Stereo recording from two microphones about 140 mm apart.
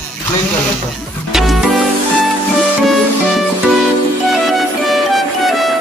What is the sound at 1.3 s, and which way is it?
Music, centre (ahead or behind).